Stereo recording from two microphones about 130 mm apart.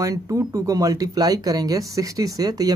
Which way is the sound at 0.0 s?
25° right (ahead or behind).